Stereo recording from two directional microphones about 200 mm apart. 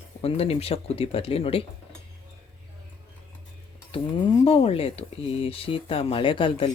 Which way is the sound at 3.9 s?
25° left (ahead or behind).